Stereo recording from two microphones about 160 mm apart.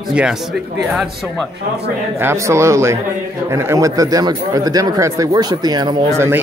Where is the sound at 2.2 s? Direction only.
15° right (ahead or behind).